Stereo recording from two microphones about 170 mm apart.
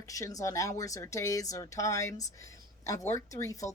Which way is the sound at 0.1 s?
20° left (ahead or behind).